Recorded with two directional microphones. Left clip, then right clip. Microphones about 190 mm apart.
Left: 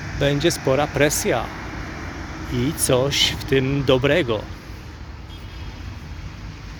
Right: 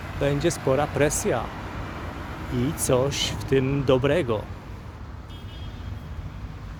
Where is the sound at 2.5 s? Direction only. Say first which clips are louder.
Left 3 dB; centre (ahead or behind).